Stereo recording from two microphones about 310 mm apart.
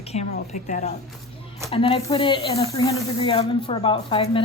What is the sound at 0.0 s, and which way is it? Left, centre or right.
A woman's voice, left.